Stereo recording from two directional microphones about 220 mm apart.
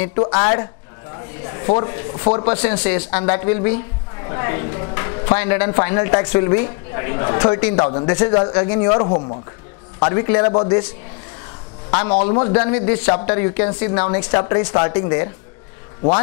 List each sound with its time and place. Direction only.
0.2 s a woman's voice: 20° left (ahead or behind)
2.8 s a woman's voice: 10° left (ahead or behind)
11.9 s a woman's voice: 20° left (ahead or behind)